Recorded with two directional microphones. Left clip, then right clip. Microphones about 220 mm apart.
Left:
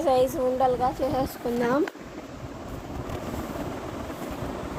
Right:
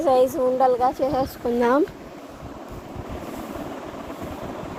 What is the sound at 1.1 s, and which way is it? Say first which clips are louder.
Speech: right 4 dB; 30° right (ahead or behind).